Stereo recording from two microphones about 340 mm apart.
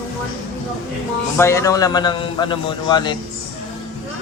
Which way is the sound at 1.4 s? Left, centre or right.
Centre.